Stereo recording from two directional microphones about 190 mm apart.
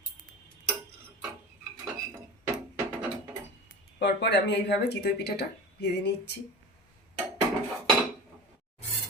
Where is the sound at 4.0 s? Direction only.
65° left (ahead or behind).